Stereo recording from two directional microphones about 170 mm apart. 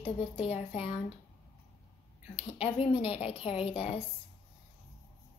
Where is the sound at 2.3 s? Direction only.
35° left (ahead or behind).